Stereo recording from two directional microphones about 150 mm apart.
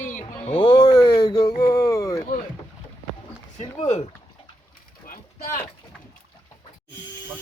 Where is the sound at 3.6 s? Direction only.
50° left (ahead or behind).